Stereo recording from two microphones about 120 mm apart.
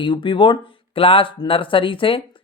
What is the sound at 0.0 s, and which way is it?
Speech, 40° left (ahead or behind).